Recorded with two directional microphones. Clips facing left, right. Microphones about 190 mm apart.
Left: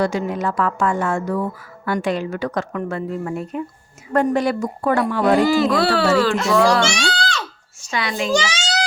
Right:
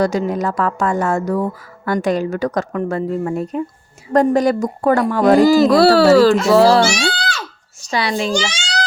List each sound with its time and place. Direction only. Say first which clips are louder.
0.0 s speech: right 3 dB; 40° right (ahead or behind)
8.3 s a child's voice: left 1 dB; centre (ahead or behind)